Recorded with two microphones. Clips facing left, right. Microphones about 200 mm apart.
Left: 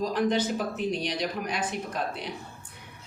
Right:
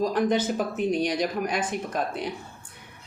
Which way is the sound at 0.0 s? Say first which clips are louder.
Right 2 dB; 50° right (ahead or behind).